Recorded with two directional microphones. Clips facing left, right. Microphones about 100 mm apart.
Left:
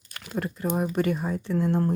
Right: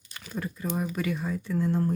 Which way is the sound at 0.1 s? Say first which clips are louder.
Left 4 dB; 65° left (ahead or behind).